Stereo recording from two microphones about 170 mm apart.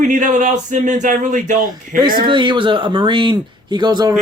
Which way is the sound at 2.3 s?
30° right (ahead or behind).